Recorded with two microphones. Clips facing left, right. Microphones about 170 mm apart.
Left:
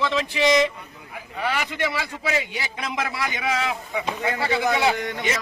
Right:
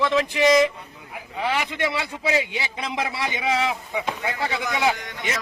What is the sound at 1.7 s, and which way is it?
A man's voice, 20° right (ahead or behind).